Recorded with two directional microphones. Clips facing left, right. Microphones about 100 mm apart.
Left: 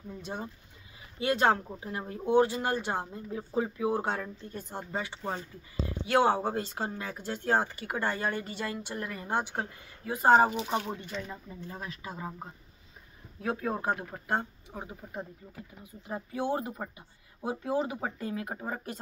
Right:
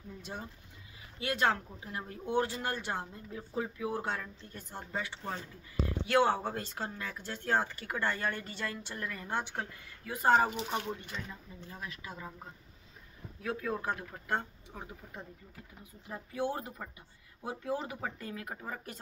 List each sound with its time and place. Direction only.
0.2 s speech: 25° left (ahead or behind)
3.3 s speech: 30° left (ahead or behind)
11.2 s speech: 35° left (ahead or behind)
13.4 s speech: 30° left (ahead or behind)